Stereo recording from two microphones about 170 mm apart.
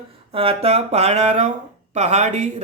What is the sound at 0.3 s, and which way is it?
Speech, 35° right (ahead or behind).